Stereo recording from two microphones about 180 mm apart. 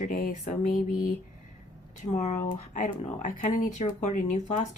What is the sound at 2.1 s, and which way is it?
Speech, 40° left (ahead or behind).